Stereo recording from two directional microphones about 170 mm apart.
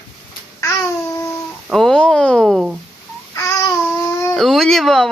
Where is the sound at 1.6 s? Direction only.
Centre (ahead or behind).